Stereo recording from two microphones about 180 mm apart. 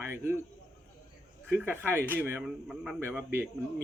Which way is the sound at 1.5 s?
10° right (ahead or behind).